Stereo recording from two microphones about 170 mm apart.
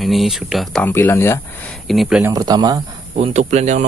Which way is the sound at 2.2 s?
20° right (ahead or behind).